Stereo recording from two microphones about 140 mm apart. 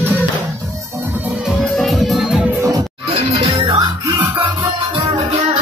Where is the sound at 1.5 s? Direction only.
Centre (ahead or behind).